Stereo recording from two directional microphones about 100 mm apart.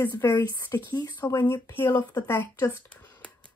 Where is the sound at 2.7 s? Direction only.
15° left (ahead or behind).